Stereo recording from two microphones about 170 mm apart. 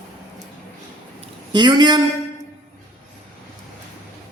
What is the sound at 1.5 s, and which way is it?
Speech, 25° right (ahead or behind).